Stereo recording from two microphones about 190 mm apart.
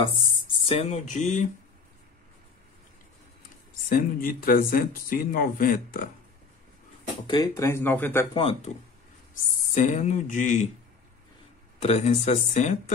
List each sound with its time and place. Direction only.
0.7 s speech: 40° left (ahead or behind)
3.9 s speech: 50° left (ahead or behind)
7.2 s speech: 15° left (ahead or behind)
8.4 s speech: 30° left (ahead or behind)
11.8 s speech: 35° left (ahead or behind)